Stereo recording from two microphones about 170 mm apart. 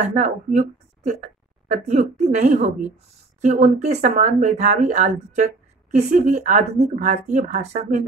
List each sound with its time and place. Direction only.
0.0 s a woman's voice: 45° right (ahead or behind)